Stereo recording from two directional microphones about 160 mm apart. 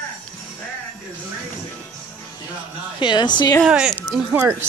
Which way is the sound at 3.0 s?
30° left (ahead or behind).